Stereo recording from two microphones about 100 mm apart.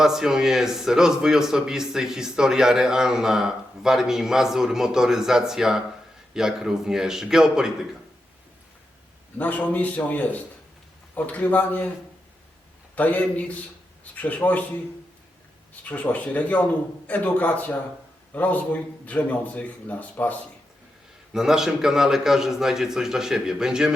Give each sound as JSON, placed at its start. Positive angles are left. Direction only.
{"t": 0.0, "sound": "a man's voice", "side_deg": -5}
{"t": 9.4, "sound": "a man's voice", "side_deg": 15}
{"t": 13.0, "sound": "a man's voice", "side_deg": 15}
{"t": 15.7, "sound": "a man's voice", "side_deg": 15}
{"t": 21.3, "sound": "a man's voice", "side_deg": -5}